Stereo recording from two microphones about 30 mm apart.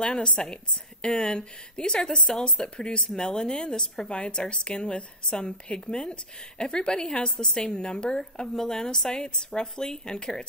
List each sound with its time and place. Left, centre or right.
0.0 s a woman's voice: left
8.2 s a woman's voice: centre